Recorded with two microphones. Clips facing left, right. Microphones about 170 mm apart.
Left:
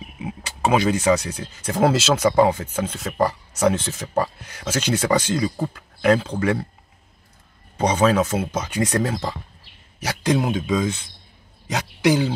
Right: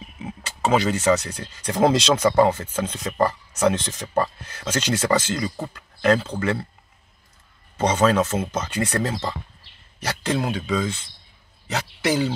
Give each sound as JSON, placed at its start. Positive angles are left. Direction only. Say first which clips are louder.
{"t": 0.0, "sound": "speech", "louder": "left 3 dB", "side_deg": 10}
{"t": 7.7, "sound": "speech", "louder": "left 1 dB", "side_deg": 10}